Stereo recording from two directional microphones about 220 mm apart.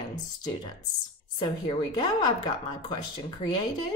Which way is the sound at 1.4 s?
20° left (ahead or behind).